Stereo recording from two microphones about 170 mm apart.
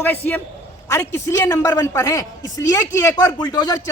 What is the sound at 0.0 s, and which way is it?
A man's voice, 10° left (ahead or behind).